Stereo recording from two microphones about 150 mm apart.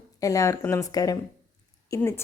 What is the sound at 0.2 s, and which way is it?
A woman's voice, 20° left (ahead or behind).